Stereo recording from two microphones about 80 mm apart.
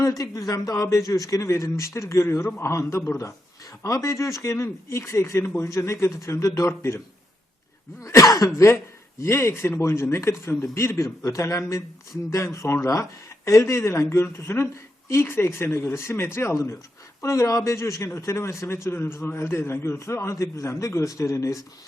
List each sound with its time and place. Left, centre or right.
0.0 s a man's voice: left
8.0 s cough: left
9.2 s a man's voice: left